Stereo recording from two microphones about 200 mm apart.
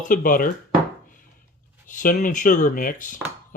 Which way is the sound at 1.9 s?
40° left (ahead or behind).